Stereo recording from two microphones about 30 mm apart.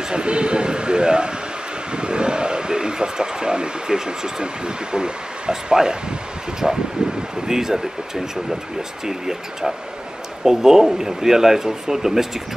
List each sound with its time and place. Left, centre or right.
0.1 s speech: right; by 6.8 s centre
7.0 s speech: right
7.4 s speech: centre
9.0 s speech: centre